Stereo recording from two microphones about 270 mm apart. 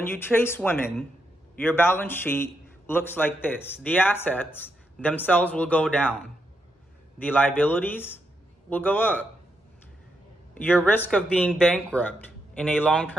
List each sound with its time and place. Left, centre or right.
0.0 s a man's voice: centre
10.5 s speech: centre